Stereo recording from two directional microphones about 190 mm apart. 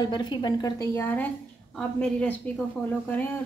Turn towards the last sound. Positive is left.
turn(degrees=10)  # may be behind; listen again after turning